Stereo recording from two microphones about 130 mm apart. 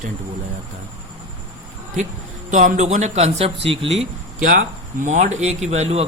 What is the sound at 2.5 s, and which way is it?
Speech, 75° right (ahead or behind).